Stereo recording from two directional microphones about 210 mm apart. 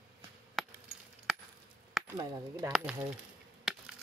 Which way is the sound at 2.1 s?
15° right (ahead or behind).